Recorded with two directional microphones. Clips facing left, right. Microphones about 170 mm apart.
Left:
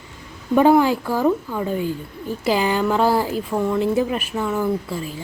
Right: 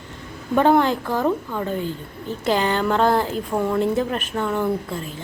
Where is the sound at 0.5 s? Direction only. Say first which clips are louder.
Left 2 dB; 5° left (ahead or behind).